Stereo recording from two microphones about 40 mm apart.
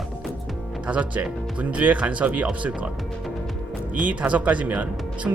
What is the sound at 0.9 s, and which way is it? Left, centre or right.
Speech, right.